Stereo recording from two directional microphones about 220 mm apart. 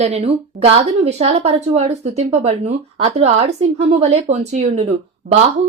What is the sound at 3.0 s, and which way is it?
Speech, 30° right (ahead or behind).